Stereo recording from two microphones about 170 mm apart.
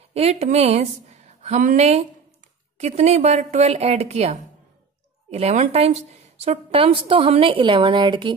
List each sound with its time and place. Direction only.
0.1 s a woman's voice: 35° right (ahead or behind)